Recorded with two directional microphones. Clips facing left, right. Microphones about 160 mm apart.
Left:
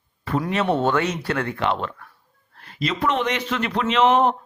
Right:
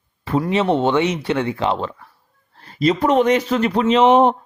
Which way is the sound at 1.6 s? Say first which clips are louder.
Right 3 dB; 30° right (ahead or behind).